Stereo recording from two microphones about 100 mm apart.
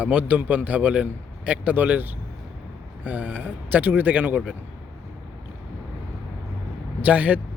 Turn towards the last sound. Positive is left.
turn(degrees=-15)  # may be behind; listen again after turning